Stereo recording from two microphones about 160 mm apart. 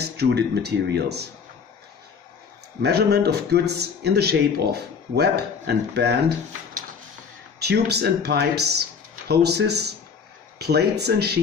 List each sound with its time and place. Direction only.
0.0 s a man's voice: 90° right
2.8 s a man's voice: 90° right
7.5 s a man's voice: 90° right